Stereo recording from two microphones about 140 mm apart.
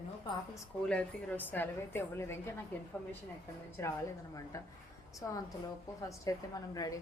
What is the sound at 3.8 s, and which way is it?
Speech, 20° left (ahead or behind).